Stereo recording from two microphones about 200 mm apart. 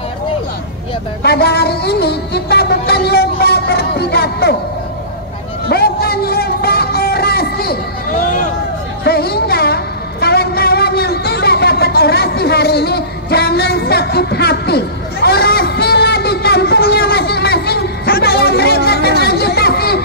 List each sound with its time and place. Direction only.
1.2 s music: 55° left (ahead or behind)
5.7 s a sound: 50° left (ahead or behind)
9.0 s music: 50° left (ahead or behind)